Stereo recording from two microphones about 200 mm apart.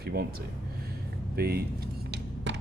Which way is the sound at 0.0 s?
50° right (ahead or behind).